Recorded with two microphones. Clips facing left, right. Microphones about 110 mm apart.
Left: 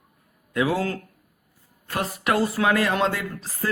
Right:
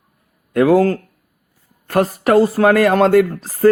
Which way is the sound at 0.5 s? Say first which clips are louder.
Right 11 dB; 55° right (ahead or behind).